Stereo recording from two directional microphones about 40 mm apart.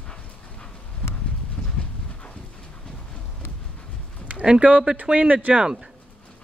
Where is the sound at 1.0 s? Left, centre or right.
Left.